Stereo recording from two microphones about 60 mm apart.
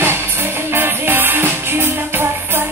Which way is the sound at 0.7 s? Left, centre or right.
Right.